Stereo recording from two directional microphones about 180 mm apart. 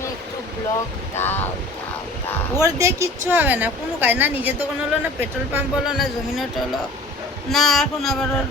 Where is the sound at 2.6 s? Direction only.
15° right (ahead or behind).